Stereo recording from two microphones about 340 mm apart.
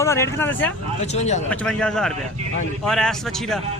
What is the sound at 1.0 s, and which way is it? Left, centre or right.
Speech, centre.